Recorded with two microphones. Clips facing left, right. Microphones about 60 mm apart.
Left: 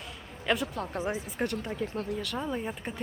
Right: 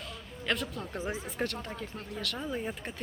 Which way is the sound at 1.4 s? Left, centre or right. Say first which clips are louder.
Left 5 dB; centre.